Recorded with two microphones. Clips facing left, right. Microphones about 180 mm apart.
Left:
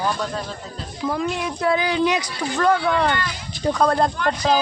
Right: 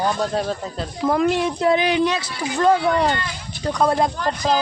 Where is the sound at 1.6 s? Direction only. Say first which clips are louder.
Even; 20° right (ahead or behind).